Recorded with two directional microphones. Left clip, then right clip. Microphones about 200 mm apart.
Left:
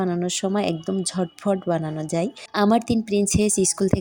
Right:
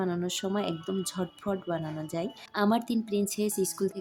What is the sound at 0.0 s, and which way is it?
Speech, 25° left (ahead or behind).